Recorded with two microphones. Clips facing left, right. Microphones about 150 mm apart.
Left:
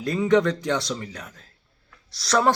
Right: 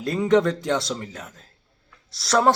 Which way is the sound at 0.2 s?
Centre (ahead or behind).